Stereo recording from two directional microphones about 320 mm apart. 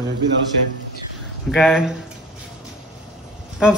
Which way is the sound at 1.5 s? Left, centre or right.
Centre.